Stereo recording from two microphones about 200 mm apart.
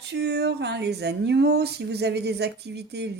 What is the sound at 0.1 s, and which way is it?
A woman's voice, 55° right (ahead or behind).